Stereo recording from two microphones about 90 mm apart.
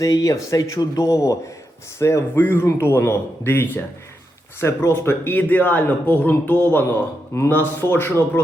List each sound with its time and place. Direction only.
0.0 s speech: 40° left (ahead or behind)